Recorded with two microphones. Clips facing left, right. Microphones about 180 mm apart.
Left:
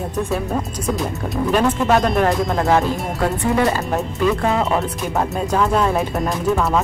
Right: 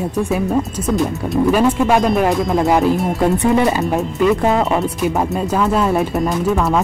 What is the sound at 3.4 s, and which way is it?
Speech, 20° right (ahead or behind).